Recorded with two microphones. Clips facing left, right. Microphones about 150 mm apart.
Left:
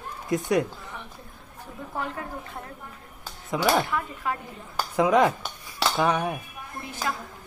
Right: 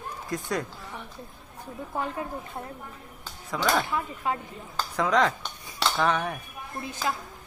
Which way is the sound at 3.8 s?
25° right (ahead or behind).